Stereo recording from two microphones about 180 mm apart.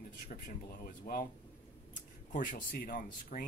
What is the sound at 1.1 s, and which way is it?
Speech, 55° left (ahead or behind).